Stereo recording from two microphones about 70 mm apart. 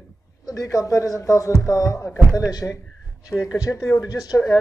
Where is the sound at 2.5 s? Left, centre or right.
Left.